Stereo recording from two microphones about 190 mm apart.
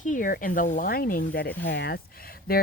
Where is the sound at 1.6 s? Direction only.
60° left (ahead or behind).